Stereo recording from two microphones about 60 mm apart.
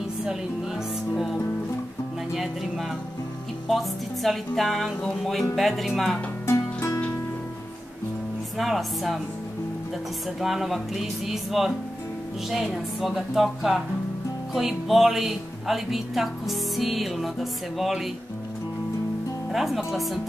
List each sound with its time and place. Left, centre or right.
1.1 s speech: centre
3.6 s speech: centre
8.5 s speech: centre
10.4 s speech: centre
13.0 s speech: centre
19.5 s speech: centre